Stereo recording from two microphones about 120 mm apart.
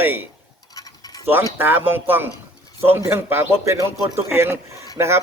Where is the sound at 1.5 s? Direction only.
15° right (ahead or behind).